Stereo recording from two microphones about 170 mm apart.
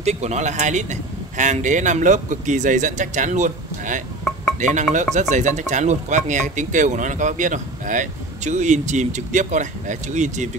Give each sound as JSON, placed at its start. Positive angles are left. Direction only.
{"t": 0.0, "sound": "speech", "side_deg": -40}